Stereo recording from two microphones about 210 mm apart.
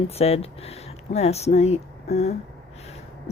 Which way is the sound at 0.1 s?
30° left (ahead or behind).